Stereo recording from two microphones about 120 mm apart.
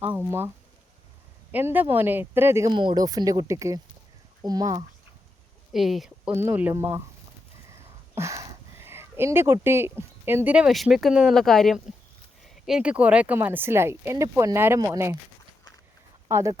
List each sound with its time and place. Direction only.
0.0 s speech: 15° right (ahead or behind)
1.5 s speech: 15° right (ahead or behind)
2.6 s speech: 40° right (ahead or behind)
5.7 s speech: centre (ahead or behind)
6.3 s speech: 20° right (ahead or behind)
7.7 s a sound: 25° right (ahead or behind)
10.7 s speech: centre (ahead or behind); by 15.2 s 25° right (ahead or behind)
16.3 s speech: 25° right (ahead or behind)